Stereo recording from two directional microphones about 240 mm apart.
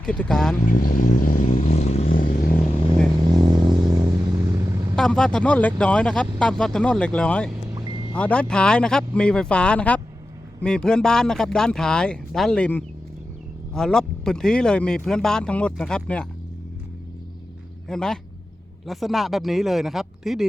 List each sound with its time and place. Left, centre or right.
0.0 s speech: centre
0.7 s vehicle: left
3.5 s music: centre
4.4 s vehicle: centre
4.9 s speech: centre
7.7 s vehicle: centre
8.1 s speech: centre
17.8 s speech: centre